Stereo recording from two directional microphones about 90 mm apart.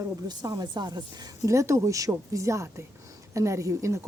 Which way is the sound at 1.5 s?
35° right (ahead or behind).